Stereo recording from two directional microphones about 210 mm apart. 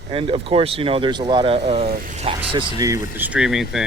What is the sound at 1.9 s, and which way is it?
Speech, 40° right (ahead or behind).